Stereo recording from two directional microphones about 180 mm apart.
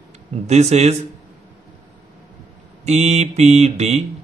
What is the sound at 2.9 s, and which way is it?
A man's voice, 35° right (ahead or behind).